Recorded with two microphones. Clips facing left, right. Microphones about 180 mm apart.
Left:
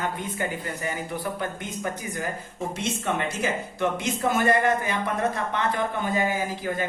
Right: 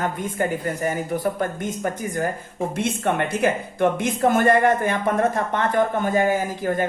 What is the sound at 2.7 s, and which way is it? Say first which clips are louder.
Speech: right 5 dB; 55° right (ahead or behind).